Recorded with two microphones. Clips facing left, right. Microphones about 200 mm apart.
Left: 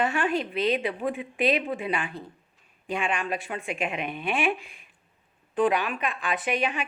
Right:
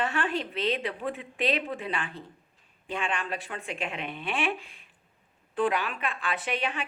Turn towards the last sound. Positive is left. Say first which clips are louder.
# left 4 dB
turn(degrees=15)  # may be behind; listen again after turning